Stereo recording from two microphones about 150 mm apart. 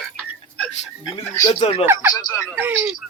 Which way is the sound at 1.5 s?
40° left (ahead or behind).